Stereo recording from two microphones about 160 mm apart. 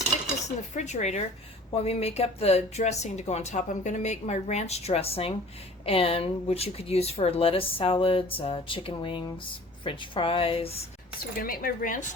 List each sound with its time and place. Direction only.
0.4 s speech: 45° left (ahead or behind)
11.3 s speech: 65° left (ahead or behind)